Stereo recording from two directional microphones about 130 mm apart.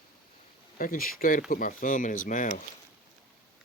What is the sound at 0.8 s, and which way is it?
Speech, 90° left.